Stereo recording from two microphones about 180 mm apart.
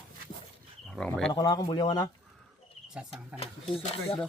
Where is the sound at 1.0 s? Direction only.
5° left (ahead or behind).